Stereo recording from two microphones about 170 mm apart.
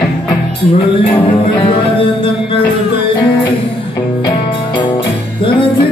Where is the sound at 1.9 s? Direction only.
30° left (ahead or behind).